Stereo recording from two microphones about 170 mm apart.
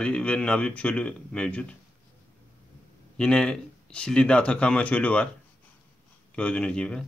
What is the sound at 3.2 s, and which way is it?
A man's voice, 5° left (ahead or behind).